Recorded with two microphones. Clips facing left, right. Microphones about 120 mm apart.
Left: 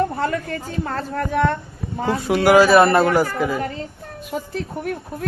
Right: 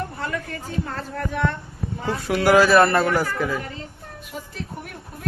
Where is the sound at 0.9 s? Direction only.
55° left (ahead or behind).